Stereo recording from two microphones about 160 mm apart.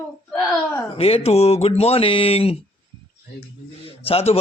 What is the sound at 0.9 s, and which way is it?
Speech, 35° left (ahead or behind).